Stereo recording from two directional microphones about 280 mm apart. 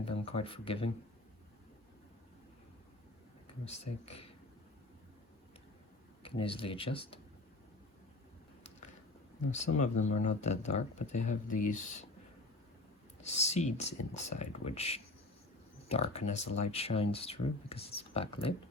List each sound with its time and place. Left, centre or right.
0.0 s speech: left
3.7 s speech: left
6.2 s speech: centre
9.5 s speech: left
13.2 s speech: left